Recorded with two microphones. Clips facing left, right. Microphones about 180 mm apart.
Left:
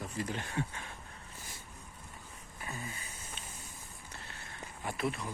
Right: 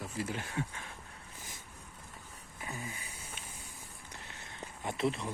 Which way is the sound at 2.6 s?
15° right (ahead or behind).